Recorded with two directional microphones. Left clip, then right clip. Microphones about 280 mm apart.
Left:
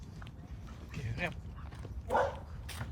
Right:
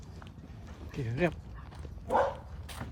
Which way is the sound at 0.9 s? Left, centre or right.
Centre.